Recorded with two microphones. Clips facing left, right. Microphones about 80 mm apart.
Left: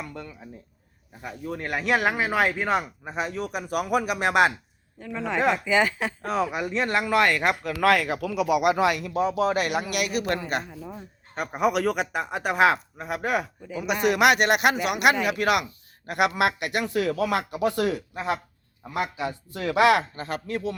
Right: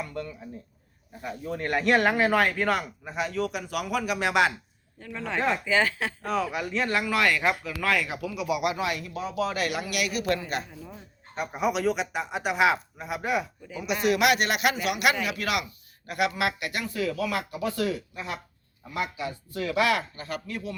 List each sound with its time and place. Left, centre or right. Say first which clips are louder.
0.1 s speech: right 3 dB; centre; by 4.5 s left
4.9 s speech: left 4 dB; centre
7.0 s speech: left 5 dB; left
7.8 s speech: left 6 dB; left
9.3 s speech: even; left
10.7 s speech: left 5 dB; centre
11.3 s speech: left 3 dB; left
16.0 s speech: left 4 dB; left
18.9 s speech: left 3 dB; left
19.1 s speech: left 2 dB; left